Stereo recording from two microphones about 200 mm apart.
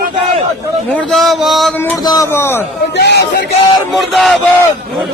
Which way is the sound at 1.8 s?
15° left (ahead or behind).